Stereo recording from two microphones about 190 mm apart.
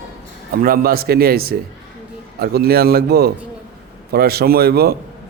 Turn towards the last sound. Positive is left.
turn(degrees=-55)  # may be behind; listen again after turning